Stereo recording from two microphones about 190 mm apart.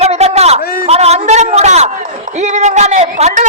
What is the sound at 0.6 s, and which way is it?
Speech, 50° left (ahead or behind).